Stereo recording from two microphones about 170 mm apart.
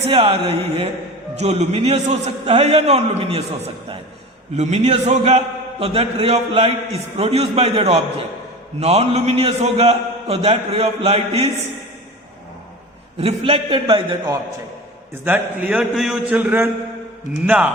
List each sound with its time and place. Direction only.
0.1 s a man's voice: 35° right (ahead or behind)
4.5 s a man's voice: 40° right (ahead or behind)
13.1 s a man's voice: 30° right (ahead or behind)
15.2 s a man's voice: 10° right (ahead or behind)